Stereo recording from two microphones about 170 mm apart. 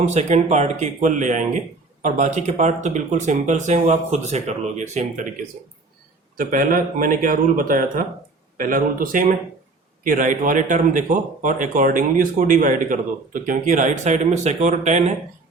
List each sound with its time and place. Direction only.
0.0 s speech: 40° right (ahead or behind)
6.3 s speech: 55° right (ahead or behind)